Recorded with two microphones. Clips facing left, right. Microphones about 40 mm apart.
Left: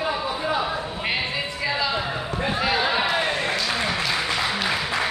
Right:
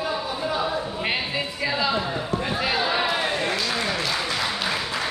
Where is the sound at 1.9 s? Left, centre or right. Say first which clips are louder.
Right 1 dB; centre.